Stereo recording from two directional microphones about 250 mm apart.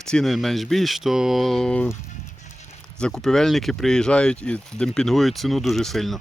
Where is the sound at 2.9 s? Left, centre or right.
Centre.